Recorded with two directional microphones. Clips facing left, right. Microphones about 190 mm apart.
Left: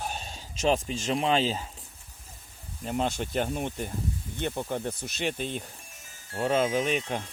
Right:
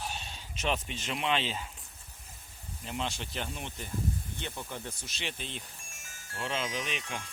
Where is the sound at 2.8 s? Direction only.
45° left (ahead or behind).